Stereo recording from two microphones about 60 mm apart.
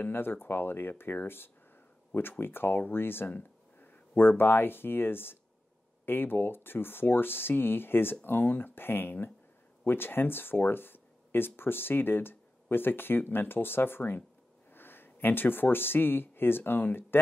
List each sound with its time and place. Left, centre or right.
0.0 s speech: left